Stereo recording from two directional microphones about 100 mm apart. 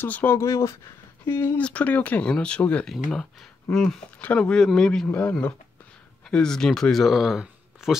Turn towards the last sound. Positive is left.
turn(degrees=-5)  # may be behind; listen again after turning